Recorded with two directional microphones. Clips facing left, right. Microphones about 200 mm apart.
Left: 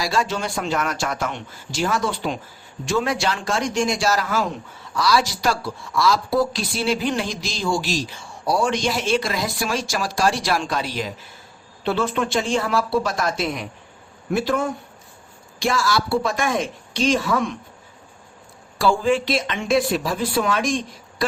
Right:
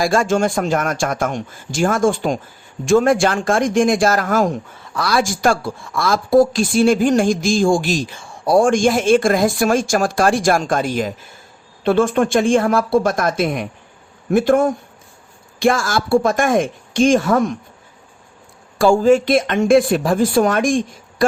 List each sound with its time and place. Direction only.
0.0 s speech: 50° right (ahead or behind)
18.8 s speech: 45° right (ahead or behind)